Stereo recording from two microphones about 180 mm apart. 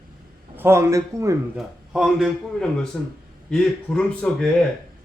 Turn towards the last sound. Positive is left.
turn(degrees=5)  # may be behind; listen again after turning